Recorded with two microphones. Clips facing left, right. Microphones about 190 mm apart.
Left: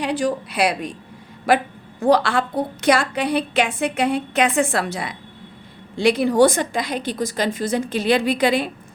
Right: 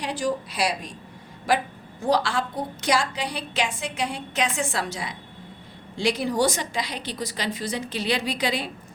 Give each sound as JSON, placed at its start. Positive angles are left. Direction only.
{"t": 0.0, "sound": "a woman's voice", "side_deg": 65}